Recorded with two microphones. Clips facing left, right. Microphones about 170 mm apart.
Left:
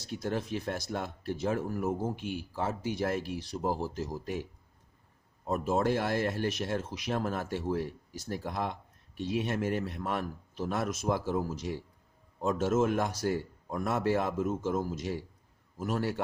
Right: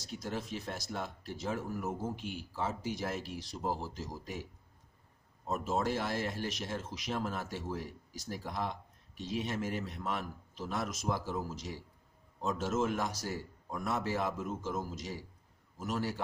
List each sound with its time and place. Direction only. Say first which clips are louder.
0.0 s speech: left 6 dB; 55° left (ahead or behind)
5.5 s speech: left 5 dB; 55° left (ahead or behind)